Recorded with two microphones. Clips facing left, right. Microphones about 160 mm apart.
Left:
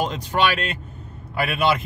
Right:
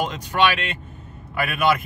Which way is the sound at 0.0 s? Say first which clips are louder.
Even; 35° left (ahead or behind).